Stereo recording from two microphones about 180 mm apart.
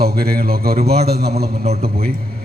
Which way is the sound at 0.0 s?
60° right (ahead or behind).